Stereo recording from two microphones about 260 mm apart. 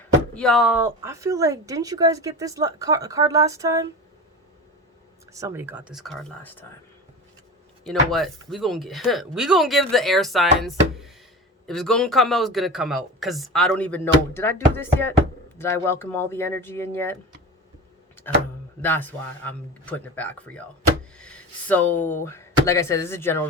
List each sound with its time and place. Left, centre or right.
0.3 s speech: centre
5.3 s speech: centre
7.9 s speech: centre
18.8 s speech: centre